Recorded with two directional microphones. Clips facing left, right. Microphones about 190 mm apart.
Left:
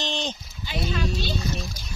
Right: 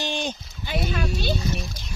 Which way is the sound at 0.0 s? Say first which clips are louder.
Right 2 dB; 10° right (ahead or behind).